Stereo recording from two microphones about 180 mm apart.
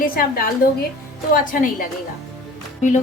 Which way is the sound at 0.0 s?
55° left (ahead or behind).